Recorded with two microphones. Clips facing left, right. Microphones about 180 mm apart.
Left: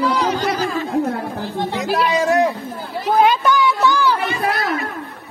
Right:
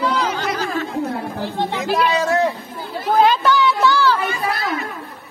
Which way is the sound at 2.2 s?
15° left (ahead or behind).